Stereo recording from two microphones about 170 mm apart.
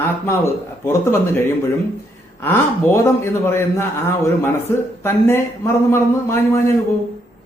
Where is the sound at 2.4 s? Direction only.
15° left (ahead or behind).